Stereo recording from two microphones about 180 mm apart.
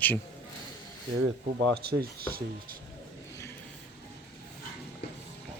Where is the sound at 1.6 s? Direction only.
60° right (ahead or behind).